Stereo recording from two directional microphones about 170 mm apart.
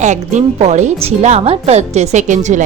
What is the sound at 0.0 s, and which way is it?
A woman's voice, 45° right (ahead or behind).